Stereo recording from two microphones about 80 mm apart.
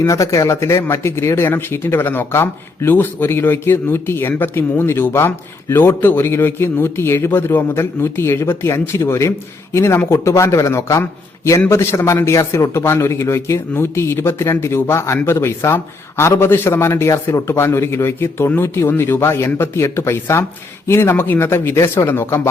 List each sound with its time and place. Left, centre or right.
0.1 s speech: left